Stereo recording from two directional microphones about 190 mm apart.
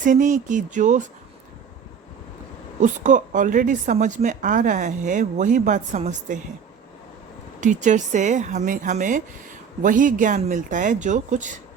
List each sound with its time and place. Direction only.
0.0 s a woman's voice: 40° right (ahead or behind)
2.8 s a woman's voice: 40° right (ahead or behind)
7.6 s a woman's voice: 40° right (ahead or behind)